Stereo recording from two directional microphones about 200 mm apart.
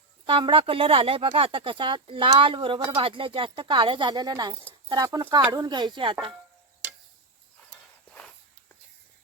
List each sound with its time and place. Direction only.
0.3 s speech: 25° right (ahead or behind)